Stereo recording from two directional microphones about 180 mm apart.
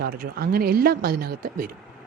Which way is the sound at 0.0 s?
55° right (ahead or behind).